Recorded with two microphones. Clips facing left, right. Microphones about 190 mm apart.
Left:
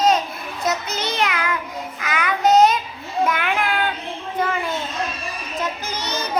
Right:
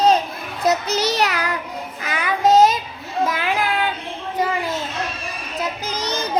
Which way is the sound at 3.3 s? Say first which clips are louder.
Right 1 dB; 30° right (ahead or behind).